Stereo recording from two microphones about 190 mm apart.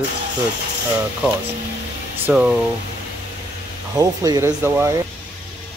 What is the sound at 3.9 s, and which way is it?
Speech, 20° right (ahead or behind).